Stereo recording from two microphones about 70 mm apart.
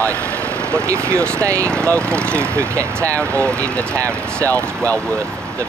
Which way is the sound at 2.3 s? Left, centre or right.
Right.